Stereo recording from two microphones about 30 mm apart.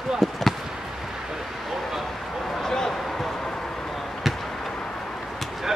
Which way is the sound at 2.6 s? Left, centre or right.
Centre.